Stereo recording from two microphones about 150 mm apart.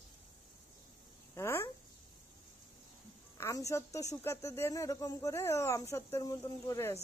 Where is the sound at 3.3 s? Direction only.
20° left (ahead or behind).